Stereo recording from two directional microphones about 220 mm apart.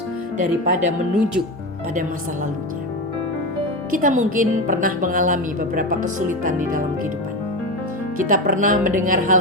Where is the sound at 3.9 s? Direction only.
35° right (ahead or behind).